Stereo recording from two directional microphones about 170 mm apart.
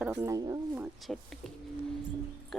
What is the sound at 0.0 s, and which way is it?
Speech, 15° right (ahead or behind).